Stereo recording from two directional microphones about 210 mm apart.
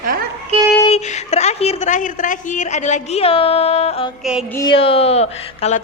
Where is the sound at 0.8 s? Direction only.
30° left (ahead or behind).